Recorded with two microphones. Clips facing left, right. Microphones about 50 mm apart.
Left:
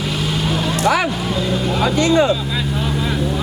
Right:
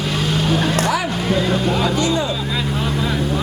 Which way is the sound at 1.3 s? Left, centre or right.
Centre.